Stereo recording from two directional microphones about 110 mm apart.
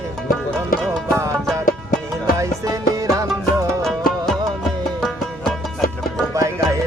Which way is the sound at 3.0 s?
30° right (ahead or behind).